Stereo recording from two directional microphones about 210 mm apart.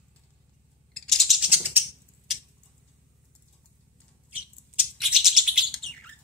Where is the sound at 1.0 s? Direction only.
Centre (ahead or behind).